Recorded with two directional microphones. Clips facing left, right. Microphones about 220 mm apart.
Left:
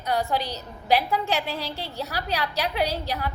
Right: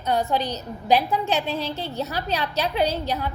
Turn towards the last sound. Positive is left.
turn(degrees=-20)  # may be behind; listen again after turning